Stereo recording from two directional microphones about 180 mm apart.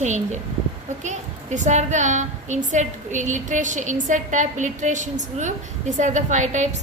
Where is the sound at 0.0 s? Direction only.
40° right (ahead or behind).